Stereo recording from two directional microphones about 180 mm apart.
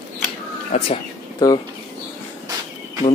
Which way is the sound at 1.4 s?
20° left (ahead or behind).